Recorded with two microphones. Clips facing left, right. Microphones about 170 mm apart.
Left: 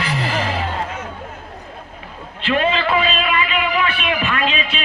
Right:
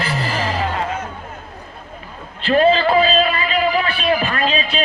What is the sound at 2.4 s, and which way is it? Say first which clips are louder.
A man's voice: right 5 dB; 35° right (ahead or behind).